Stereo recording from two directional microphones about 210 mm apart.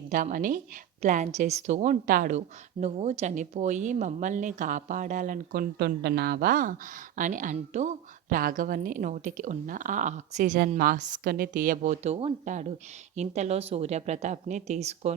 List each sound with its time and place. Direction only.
0.1 s speech: 40° right (ahead or behind)